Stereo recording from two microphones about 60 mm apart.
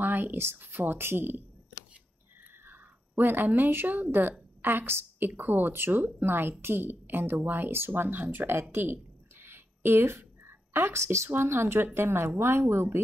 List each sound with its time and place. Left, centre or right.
0.0 s speech: right
2.6 s a woman's voice: right
8.7 s a sound: right
11.2 s speech: right